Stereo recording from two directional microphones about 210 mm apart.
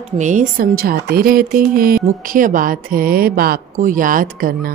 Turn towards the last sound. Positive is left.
turn(degrees=-40)  # may be behind; listen again after turning